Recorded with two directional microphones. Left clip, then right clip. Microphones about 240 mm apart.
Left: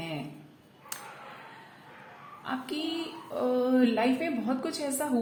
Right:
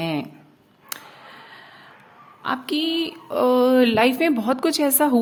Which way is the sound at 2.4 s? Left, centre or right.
Right.